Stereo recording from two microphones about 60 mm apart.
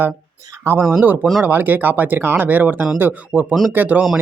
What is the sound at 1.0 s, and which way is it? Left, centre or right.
Speech, right.